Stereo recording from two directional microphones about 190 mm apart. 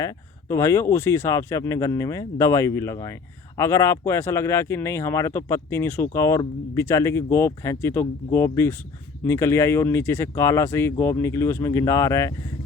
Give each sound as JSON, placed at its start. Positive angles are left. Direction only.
{"t": 0.0, "sound": "speech", "side_deg": 15}